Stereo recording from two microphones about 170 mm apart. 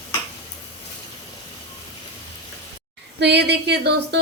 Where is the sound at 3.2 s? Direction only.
80° right.